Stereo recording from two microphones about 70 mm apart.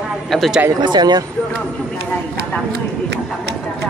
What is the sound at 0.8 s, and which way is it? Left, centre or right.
Speech, right.